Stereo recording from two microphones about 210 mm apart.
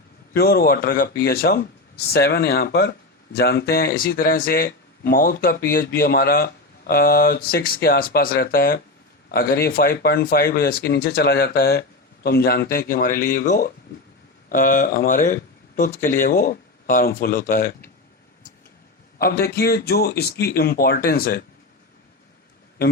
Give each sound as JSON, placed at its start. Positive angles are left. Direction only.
{"t": 0.3, "sound": "speech", "side_deg": 45}
{"t": 19.2, "sound": "speech", "side_deg": 50}